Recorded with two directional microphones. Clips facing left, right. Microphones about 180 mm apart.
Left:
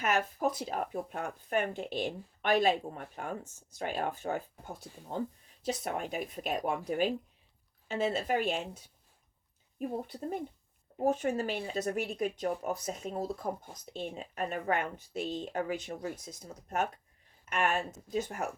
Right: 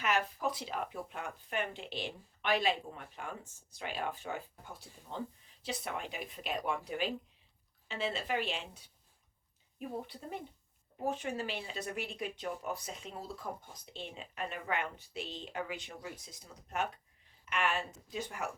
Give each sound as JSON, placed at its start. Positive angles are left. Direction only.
{"t": 0.0, "sound": "speech", "side_deg": 45}